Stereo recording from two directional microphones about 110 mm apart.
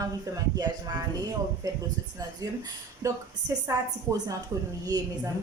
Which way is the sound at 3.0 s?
35° right (ahead or behind).